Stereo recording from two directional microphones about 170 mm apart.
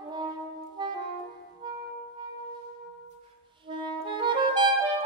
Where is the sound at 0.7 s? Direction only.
25° right (ahead or behind).